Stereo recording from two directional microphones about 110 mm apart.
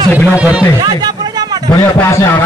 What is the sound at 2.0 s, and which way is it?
Speech, 20° left (ahead or behind).